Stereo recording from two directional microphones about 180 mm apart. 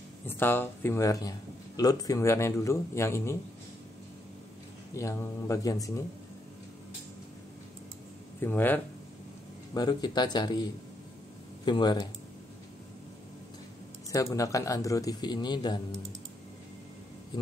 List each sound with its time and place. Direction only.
0.3 s speech: 10° left (ahead or behind)
4.9 s speech: 15° left (ahead or behind)
8.4 s speech: 10° left (ahead or behind)
9.8 s a man's voice: 25° left (ahead or behind)
14.1 s a man's voice: 20° left (ahead or behind)